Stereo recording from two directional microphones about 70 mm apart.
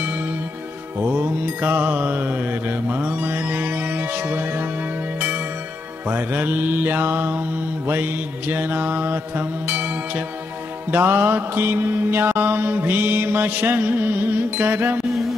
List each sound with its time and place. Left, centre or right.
1.0 s mantra: right
6.0 s mantra: right